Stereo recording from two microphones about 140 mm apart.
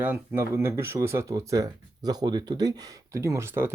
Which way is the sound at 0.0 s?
15° right (ahead or behind).